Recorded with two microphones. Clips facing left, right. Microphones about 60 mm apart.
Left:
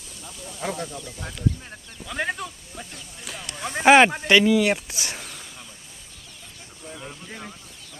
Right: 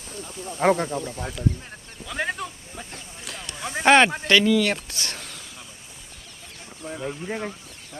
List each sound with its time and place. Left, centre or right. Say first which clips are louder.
0.3 s speech: right 10 dB; right
1.2 s speech: right 1 dB; centre
3.8 s speech: left 2 dB; centre
6.8 s a sound: right 7 dB; right
7.3 s speech: right 10 dB; right